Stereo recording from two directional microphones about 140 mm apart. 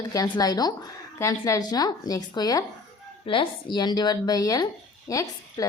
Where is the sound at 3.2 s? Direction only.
40° left (ahead or behind).